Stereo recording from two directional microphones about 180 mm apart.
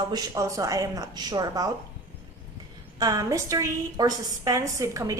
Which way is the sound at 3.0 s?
20° right (ahead or behind).